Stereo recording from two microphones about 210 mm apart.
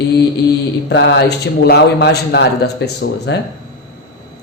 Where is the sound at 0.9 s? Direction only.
55° left (ahead or behind).